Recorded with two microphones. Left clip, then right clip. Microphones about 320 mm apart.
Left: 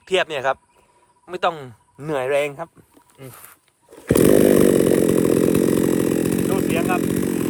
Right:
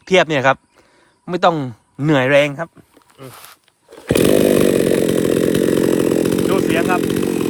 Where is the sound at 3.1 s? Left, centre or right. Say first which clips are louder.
Right 5 dB; centre.